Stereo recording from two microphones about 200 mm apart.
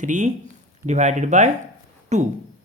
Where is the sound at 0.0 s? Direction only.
40° right (ahead or behind).